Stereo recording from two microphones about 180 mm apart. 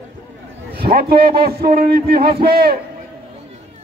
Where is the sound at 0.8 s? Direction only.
55° right (ahead or behind).